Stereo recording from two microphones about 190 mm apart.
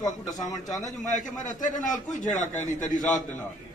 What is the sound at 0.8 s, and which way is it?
A man's voice, 40° left (ahead or behind).